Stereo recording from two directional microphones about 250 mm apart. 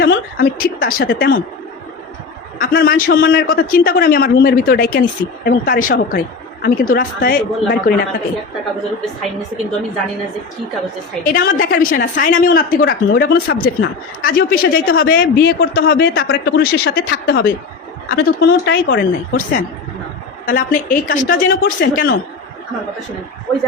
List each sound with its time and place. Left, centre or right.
0.0 s a woman's voice: left
2.6 s a woman's voice: left
11.2 s a woman's voice: left